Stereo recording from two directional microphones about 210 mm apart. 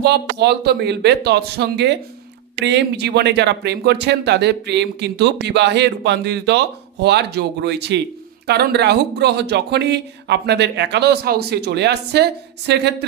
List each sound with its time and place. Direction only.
0.0 s speech: 55° right (ahead or behind)